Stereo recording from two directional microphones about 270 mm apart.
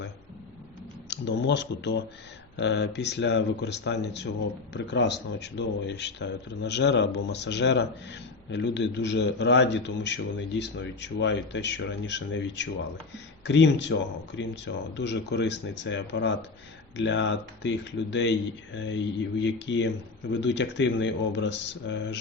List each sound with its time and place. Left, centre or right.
1.1 s a man's voice: left